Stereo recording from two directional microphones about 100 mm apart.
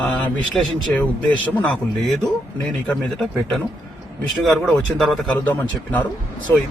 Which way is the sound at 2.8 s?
5° left (ahead or behind).